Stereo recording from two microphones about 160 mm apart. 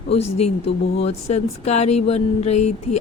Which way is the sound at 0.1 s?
40° left (ahead or behind).